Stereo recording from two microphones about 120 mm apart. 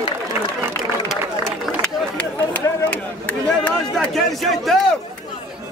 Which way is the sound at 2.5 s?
15° left (ahead or behind).